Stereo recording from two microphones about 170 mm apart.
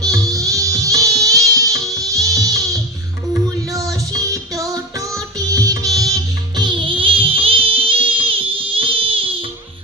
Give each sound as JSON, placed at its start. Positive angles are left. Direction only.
{"t": 0.0, "sound": "music", "side_deg": -20}
{"t": 4.1, "sound": "music", "side_deg": -20}